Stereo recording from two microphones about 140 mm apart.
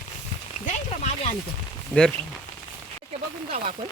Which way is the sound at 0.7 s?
55° left (ahead or behind).